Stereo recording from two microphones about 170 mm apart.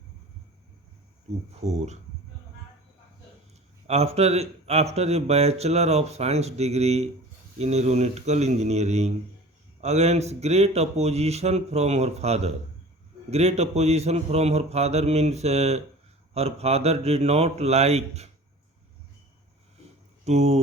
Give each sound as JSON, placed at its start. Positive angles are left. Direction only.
{"t": 1.6, "sound": "a man's voice", "side_deg": -40}
{"t": 3.8, "sound": "a man's voice", "side_deg": -35}
{"t": 20.2, "sound": "a man's voice", "side_deg": -40}